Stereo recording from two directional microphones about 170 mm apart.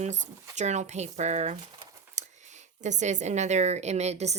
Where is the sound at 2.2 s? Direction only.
45° right (ahead or behind).